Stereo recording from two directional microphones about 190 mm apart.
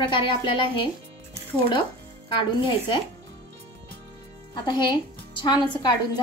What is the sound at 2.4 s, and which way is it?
Speech, 25° left (ahead or behind).